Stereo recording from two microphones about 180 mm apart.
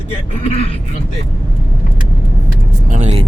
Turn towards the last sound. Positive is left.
turn(degrees=-40)  # may be behind; listen again after turning